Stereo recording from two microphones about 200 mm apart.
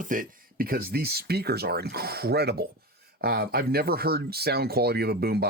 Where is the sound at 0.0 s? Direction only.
40° right (ahead or behind).